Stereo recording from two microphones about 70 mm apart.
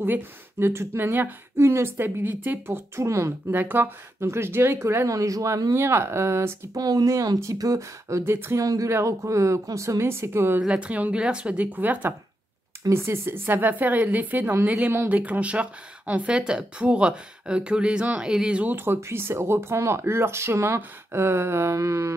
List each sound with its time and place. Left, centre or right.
0.0 s speech: right
3.5 s speech: right
6.7 s speech: right
8.2 s speech: right
8.5 s a woman's voice: right
10.6 s a woman's voice: centre
12.9 s a woman's voice: right; by 18.7 s centre
18.7 s speech: right